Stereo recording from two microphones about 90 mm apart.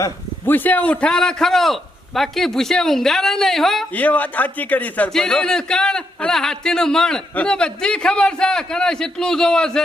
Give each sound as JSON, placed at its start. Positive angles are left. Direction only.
{"t": 0.4, "sound": "a man's voice", "side_deg": 20}
{"t": 3.9, "sound": "speech", "side_deg": 15}